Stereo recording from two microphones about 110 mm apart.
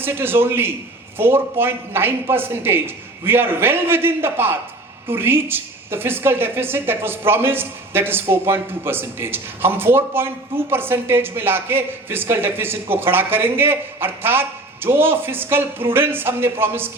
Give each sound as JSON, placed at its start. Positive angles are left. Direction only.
{"t": 0.0, "sound": "a woman's voice", "side_deg": -20}